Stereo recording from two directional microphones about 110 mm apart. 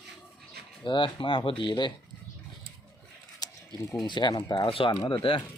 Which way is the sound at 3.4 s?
35° left (ahead or behind).